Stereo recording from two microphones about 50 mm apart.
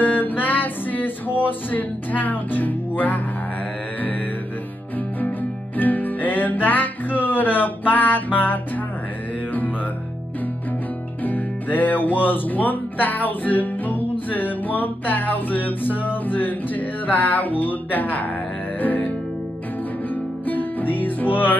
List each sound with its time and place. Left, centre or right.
0.0 s music: left
5.8 s music: left
11.2 s speech: left
18.8 s music: left
20.4 s music: left